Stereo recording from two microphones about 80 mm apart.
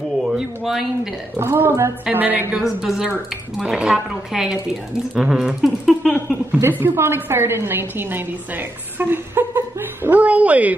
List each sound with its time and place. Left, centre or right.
0.2 s speech: centre
1.3 s a woman's voice: right
2.5 s a woman's voice: centre
6.6 s a woman's voice: right